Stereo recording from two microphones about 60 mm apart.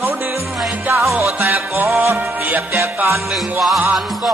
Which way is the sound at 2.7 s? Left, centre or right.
Right.